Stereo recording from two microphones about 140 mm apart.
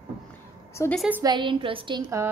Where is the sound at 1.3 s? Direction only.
35° right (ahead or behind).